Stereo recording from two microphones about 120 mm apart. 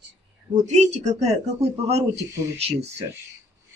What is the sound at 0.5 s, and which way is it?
Speech, 75° right (ahead or behind).